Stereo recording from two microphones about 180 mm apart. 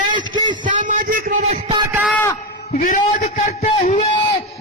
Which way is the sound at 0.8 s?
45° right (ahead or behind).